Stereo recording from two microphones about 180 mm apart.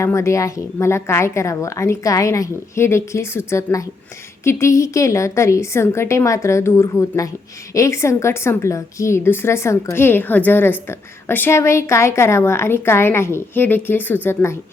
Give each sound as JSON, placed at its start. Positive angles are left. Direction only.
{"t": 0.0, "sound": "a woman's voice", "side_deg": 15}